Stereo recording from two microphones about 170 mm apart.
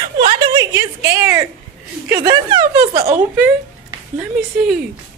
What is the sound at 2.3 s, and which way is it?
Speech, 25° right (ahead or behind).